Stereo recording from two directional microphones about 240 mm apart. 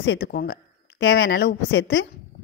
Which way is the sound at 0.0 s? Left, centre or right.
Left.